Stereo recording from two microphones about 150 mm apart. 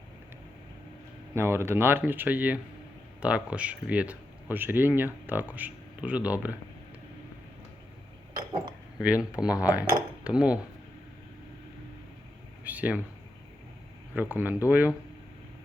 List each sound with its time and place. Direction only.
1.3 s speech: 15° right (ahead or behind)
9.0 s speech: 10° right (ahead or behind)
9.4 s speech: 25° left (ahead or behind)
10.2 s speech: 10° right (ahead or behind)
12.6 s speech: 10° right (ahead or behind)
14.2 s speech: 15° right (ahead or behind)